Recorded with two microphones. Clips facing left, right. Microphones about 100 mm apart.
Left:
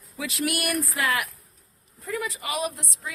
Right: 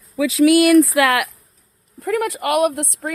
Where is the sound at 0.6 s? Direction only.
90° right; by 3.1 s 60° right (ahead or behind).